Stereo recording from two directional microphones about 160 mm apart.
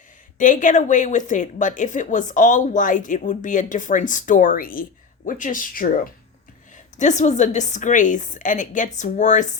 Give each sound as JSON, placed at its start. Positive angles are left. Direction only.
{"t": 0.3, "sound": "a woman's voice", "side_deg": 55}
{"t": 7.0, "sound": "a woman's voice", "side_deg": 50}